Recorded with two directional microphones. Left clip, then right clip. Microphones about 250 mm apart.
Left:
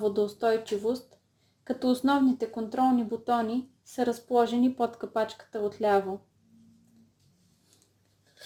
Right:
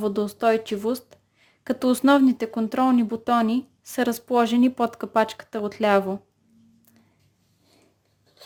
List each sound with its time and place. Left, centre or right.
0.0 s speech: right